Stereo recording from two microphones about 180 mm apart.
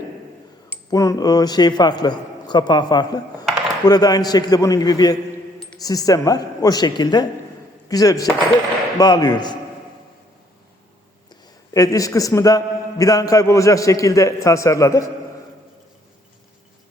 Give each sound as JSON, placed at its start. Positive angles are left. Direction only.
{"t": 0.9, "sound": "a man's voice", "side_deg": 20}
{"t": 11.7, "sound": "a man's voice", "side_deg": 20}